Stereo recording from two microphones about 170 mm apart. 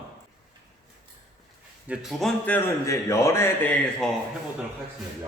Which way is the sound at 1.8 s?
Centre (ahead or behind).